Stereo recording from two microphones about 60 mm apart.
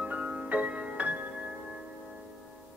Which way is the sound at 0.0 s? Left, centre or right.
Right.